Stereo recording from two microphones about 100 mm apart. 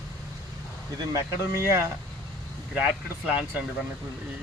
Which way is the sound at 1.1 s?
25° right (ahead or behind).